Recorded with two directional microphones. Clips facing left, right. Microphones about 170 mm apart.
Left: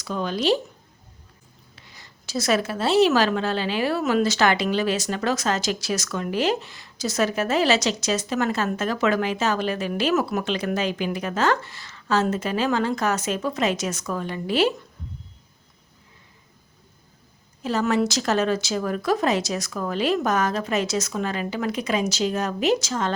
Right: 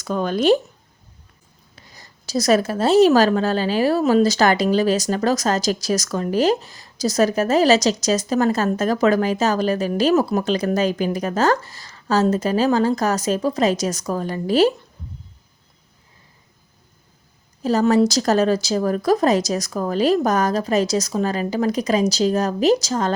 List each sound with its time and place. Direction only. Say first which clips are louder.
0.0 s speech: right 5 dB; 50° right (ahead or behind)
1.7 s a woman's voice: right 3 dB; 40° right (ahead or behind)
17.6 s a woman's voice: right 6 dB; 40° right (ahead or behind)